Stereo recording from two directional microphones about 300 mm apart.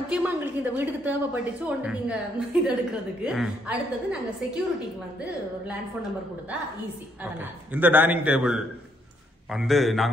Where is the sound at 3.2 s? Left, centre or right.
Centre.